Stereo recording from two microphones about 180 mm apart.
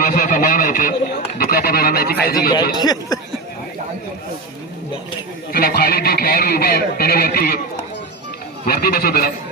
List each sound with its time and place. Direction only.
0.0 s a sound: 50° left (ahead or behind)
1.4 s speech: 55° left (ahead or behind)
2.7 s speech: 20° left (ahead or behind)
5.5 s speech: 55° left (ahead or behind)
8.6 s speech: 55° left (ahead or behind)